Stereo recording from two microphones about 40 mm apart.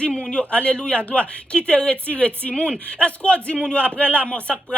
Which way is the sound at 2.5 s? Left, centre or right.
Left.